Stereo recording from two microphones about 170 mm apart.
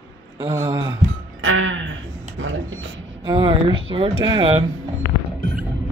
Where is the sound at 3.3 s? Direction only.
30° right (ahead or behind).